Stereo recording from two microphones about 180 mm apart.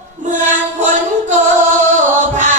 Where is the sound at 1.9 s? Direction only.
45° right (ahead or behind).